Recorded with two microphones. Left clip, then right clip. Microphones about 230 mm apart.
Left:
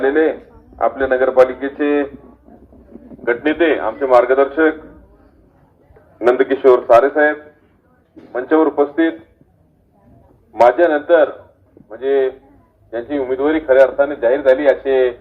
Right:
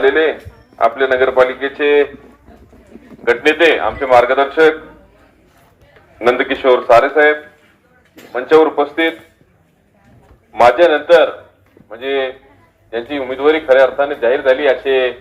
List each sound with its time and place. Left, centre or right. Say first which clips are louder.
0.0 s a man's voice: right 2 dB; right
3.2 s a man's voice: right 4 dB; right
6.1 s a man's voice: even; right
10.5 s a man's voice: right 2 dB; right